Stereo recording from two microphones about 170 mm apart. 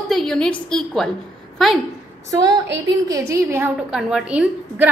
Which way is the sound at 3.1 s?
15° right (ahead or behind).